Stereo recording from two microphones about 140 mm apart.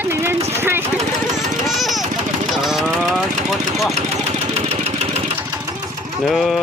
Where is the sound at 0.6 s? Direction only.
15° right (ahead or behind).